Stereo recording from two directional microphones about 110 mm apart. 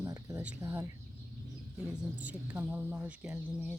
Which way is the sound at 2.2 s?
15° right (ahead or behind).